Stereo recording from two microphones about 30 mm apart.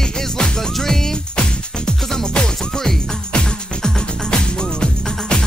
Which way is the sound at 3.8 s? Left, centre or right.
Left.